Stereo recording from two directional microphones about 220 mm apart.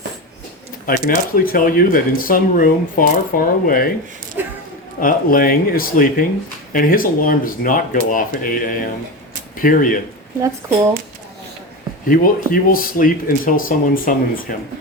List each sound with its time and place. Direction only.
0.9 s speech: 40° left (ahead or behind)
4.4 s a sound: 10° right (ahead or behind)
4.9 s speech: 40° left (ahead or behind)
12.0 s speech: 40° left (ahead or behind)